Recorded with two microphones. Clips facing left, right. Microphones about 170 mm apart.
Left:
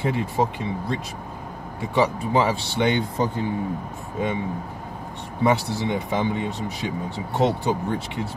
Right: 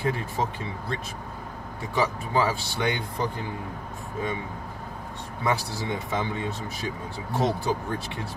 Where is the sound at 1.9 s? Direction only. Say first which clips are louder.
Left 5 dB; 20° left (ahead or behind).